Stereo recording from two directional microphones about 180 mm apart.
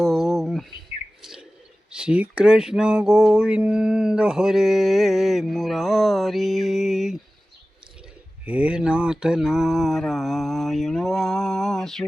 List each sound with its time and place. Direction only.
0.0 s bird: centre (ahead or behind)
1.9 s speech: 5° right (ahead or behind)
8.4 s speech: 5° right (ahead or behind)